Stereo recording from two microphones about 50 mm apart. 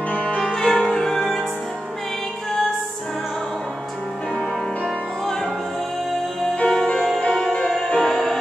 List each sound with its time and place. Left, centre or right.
0.1 s music: left
0.6 s music: centre
6.4 s music: centre